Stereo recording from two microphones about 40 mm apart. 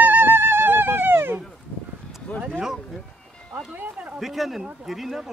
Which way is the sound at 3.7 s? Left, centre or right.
Right.